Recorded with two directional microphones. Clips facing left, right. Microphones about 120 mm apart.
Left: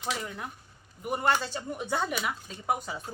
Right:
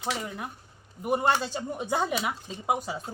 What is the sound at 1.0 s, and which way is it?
Speech, 20° right (ahead or behind).